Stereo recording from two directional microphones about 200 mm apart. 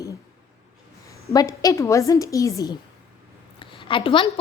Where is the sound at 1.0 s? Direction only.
15° left (ahead or behind).